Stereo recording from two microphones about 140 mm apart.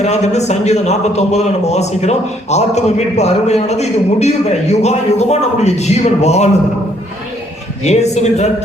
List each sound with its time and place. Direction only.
0.0 s a man's voice: 50° left (ahead or behind)
7.9 s a man's voice: 50° left (ahead or behind)